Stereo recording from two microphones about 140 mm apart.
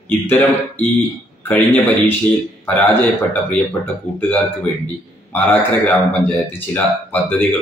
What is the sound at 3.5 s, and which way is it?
Speech, 15° left (ahead or behind).